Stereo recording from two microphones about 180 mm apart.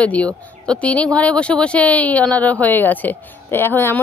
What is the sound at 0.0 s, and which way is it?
A woman's voice, 5° left (ahead or behind).